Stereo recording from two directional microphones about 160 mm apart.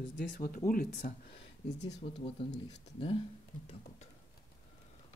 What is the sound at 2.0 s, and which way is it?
Speech, 40° left (ahead or behind).